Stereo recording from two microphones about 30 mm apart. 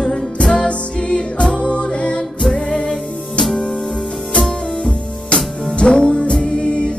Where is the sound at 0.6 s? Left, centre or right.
Left.